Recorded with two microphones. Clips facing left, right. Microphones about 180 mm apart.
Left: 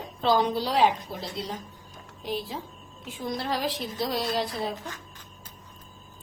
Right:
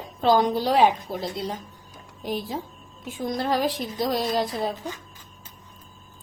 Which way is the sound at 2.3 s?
45° right (ahead or behind).